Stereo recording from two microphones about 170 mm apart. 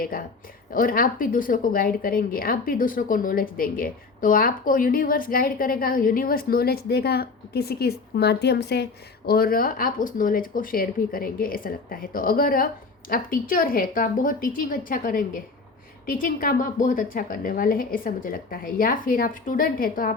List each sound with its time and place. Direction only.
0.7 s a woman's voice: 55° left (ahead or behind)